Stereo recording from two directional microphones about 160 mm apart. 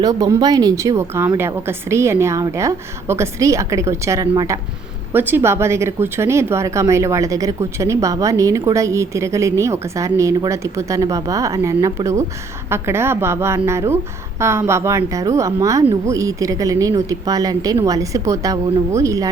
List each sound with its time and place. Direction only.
0.0 s a woman's voice: 25° right (ahead or behind)